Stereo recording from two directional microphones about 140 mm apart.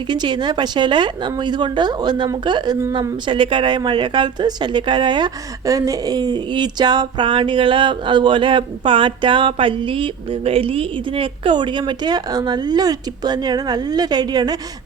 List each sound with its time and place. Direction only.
0.1 s a woman's voice: 30° right (ahead or behind)